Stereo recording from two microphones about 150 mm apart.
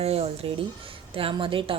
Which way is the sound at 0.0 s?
40° right (ahead or behind).